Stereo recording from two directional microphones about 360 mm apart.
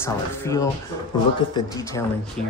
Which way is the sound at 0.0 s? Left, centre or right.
Centre.